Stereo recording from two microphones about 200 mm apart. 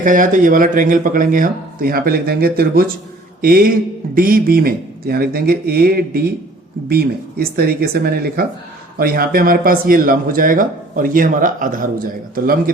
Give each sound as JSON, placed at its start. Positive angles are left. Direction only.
{"t": 0.0, "sound": "speech", "side_deg": -40}